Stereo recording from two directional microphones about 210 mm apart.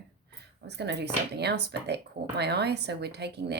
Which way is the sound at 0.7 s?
55° right (ahead or behind).